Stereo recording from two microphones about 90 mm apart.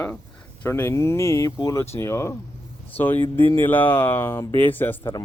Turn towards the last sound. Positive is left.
turn(degrees=20)  # may be behind; listen again after turning